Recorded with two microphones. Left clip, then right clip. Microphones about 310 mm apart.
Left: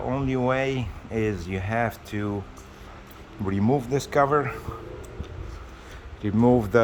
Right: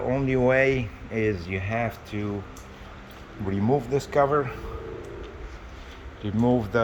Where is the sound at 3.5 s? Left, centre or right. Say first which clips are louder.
Even; centre.